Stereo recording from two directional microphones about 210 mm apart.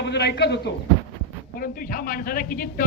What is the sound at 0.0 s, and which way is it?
A man's voice, 55° left (ahead or behind).